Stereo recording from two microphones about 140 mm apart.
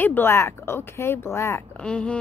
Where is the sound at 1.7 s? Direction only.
5° left (ahead or behind).